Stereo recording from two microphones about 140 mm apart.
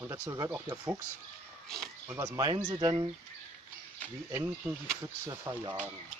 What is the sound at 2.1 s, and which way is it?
Speech, 20° right (ahead or behind).